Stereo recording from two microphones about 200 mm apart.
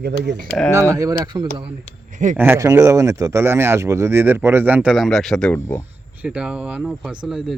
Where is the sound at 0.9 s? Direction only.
20° right (ahead or behind).